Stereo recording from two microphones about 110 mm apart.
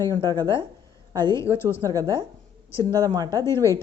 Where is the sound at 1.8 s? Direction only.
35° right (ahead or behind).